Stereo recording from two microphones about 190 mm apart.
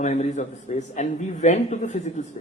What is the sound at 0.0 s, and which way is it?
Speech, 40° left (ahead or behind).